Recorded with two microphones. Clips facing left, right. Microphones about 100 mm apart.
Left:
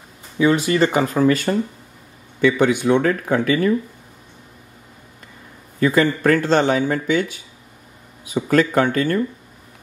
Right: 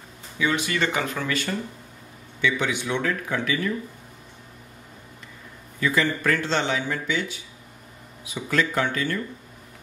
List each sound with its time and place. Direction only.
0.4 s speech: 35° left (ahead or behind)
2.4 s speech: 50° left (ahead or behind)
5.8 s speech: 45° left (ahead or behind)